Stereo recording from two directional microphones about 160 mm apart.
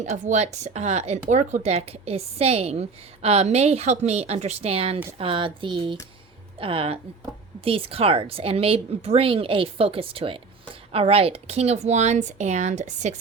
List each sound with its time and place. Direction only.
0.0 s a woman's voice: 50° right (ahead or behind)